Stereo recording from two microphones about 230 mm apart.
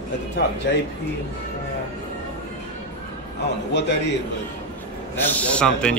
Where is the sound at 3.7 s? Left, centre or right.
Left.